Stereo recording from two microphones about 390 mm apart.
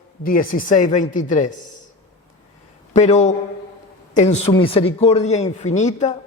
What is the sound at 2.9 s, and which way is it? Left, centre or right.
A man's voice, centre.